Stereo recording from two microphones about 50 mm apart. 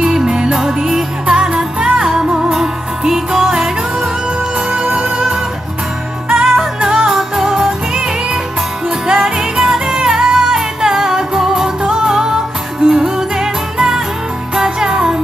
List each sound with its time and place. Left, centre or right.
0.0 s music: centre
4.8 s music: right
5.1 s music: centre
9.0 s music: centre